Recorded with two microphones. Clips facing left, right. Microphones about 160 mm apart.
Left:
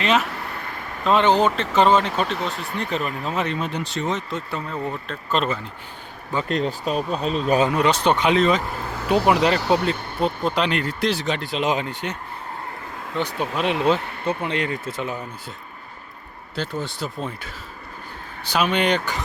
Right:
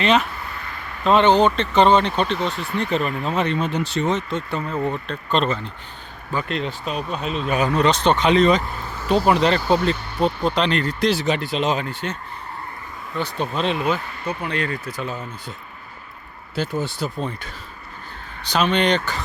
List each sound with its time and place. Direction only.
0.0 s speech: centre (ahead or behind)
6.5 s speech: 40° left (ahead or behind)
7.7 s speech: 10° left (ahead or behind)
9.6 s speech: 75° left (ahead or behind)
10.2 s speech: centre (ahead or behind)
11.1 s speech: 5° right (ahead or behind)
11.6 s speech: 15° left (ahead or behind)
13.1 s speech: 10° left (ahead or behind)
13.7 s speech: 30° left (ahead or behind)
16.6 s speech: 5° right (ahead or behind); by 19.2 s 10° left (ahead or behind)